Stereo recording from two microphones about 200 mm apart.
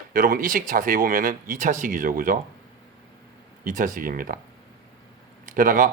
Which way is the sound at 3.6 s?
40° right (ahead or behind).